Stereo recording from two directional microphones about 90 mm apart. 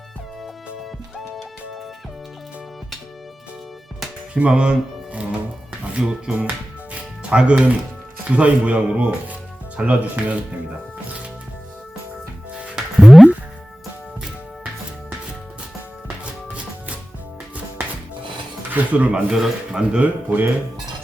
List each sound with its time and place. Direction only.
0.4 s music: centre (ahead or behind)
4.4 s speech: 10° right (ahead or behind)
12.7 s music: 5° right (ahead or behind)
18.7 s speech: 15° right (ahead or behind)